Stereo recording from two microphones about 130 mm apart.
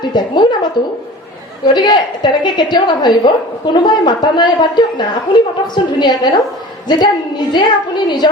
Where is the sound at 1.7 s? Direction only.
35° left (ahead or behind).